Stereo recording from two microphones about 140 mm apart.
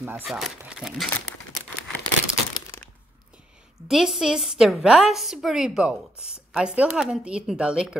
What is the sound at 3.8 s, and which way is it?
A woman's voice, centre (ahead or behind).